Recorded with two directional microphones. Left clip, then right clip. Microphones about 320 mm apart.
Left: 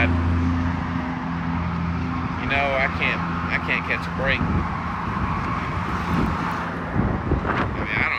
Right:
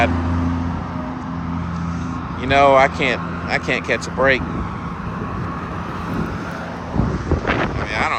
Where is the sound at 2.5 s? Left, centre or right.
Right.